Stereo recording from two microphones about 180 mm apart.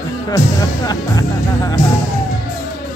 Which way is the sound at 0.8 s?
20° left (ahead or behind).